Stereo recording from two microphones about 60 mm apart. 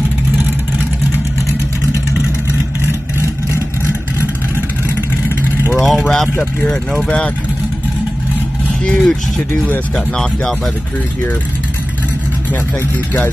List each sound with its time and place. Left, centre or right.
5.8 s speech: centre
6.3 s speech: left
8.8 s speech: centre